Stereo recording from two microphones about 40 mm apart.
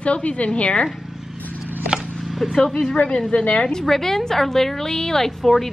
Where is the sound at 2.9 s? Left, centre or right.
Left.